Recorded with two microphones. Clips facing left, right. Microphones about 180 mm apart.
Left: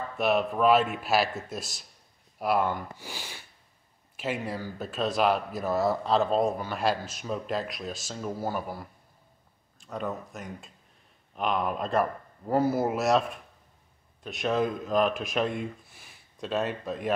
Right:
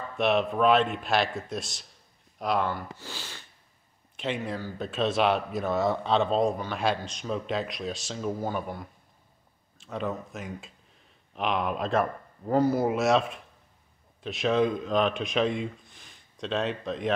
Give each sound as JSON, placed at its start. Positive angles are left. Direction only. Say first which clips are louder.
{"t": 0.2, "sound": "speech", "louder": "right 1 dB", "side_deg": 0}